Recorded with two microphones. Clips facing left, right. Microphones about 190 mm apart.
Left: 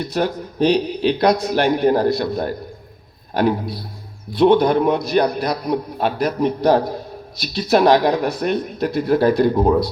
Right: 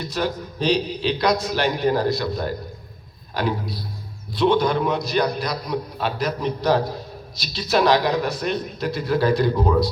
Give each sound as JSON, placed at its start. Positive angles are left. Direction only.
{"t": 0.0, "sound": "a man's voice", "side_deg": 55}